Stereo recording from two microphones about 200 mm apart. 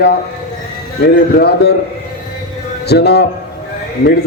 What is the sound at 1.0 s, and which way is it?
Speech, 55° left (ahead or behind).